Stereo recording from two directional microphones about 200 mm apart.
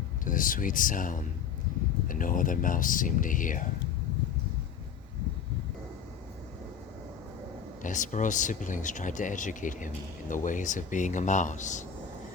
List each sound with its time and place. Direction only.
0.3 s speech: 40° left (ahead or behind)
7.8 s speech: 40° left (ahead or behind)